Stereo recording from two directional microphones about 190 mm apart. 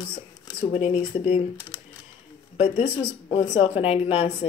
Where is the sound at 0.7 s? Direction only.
35° left (ahead or behind).